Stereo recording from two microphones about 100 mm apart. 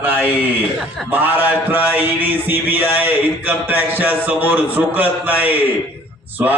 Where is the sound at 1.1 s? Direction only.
20° right (ahead or behind).